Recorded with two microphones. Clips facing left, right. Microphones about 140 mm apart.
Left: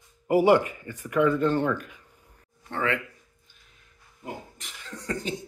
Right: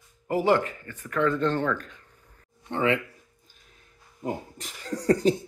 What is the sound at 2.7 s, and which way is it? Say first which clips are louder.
Speech: right 3 dB; 20° right (ahead or behind).